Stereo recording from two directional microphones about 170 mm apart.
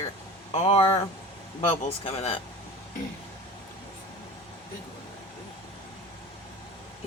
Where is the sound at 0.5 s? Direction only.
35° left (ahead or behind).